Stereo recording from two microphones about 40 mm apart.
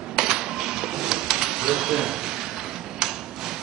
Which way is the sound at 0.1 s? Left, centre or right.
Centre.